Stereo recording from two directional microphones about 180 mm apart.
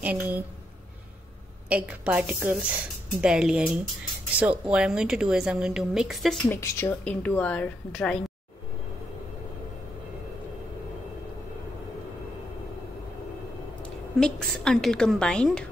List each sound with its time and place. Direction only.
0.0 s a woman's voice: 10° right (ahead or behind)
1.7 s a woman's voice: 5° right (ahead or behind)
6.5 s speech: 10° left (ahead or behind)
14.2 s a woman's voice: 5° left (ahead or behind)